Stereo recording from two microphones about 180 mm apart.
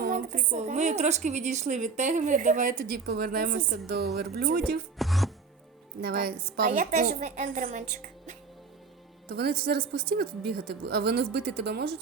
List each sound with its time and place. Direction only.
0.0 s a woman's voice: 45° right (ahead or behind)
4.9 s music: centre (ahead or behind)
6.0 s a woman's voice: 60° right (ahead or behind)
6.7 s a woman's voice: 45° right (ahead or behind)
9.3 s a woman's voice: 60° right (ahead or behind)